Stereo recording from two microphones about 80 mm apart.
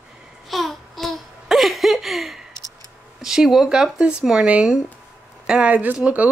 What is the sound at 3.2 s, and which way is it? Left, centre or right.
Speech, centre.